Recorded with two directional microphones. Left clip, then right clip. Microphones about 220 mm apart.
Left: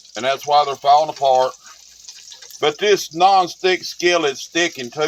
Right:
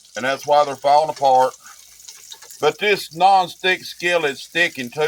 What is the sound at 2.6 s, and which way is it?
Speech, 25° left (ahead or behind).